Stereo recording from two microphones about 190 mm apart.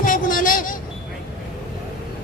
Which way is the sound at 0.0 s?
45° left (ahead or behind).